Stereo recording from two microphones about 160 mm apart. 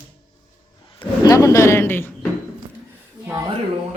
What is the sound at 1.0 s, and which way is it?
Speech, 20° left (ahead or behind).